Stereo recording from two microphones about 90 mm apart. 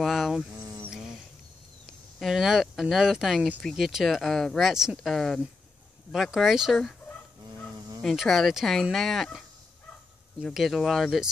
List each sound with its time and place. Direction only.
0.0 s a sound: centre (ahead or behind)
2.1 s speech: 5° right (ahead or behind)
8.0 s speech: 5° left (ahead or behind)
10.5 s speech: centre (ahead or behind)